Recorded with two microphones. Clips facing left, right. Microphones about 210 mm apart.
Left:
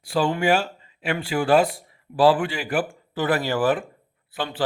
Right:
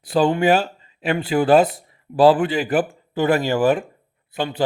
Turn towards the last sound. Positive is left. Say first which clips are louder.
# right 4 dB
turn(degrees=-20)  # may be behind; listen again after turning